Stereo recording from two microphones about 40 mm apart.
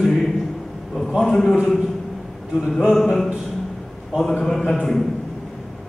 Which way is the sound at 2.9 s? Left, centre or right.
Centre.